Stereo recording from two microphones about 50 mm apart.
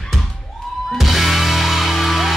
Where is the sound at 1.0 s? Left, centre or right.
Centre.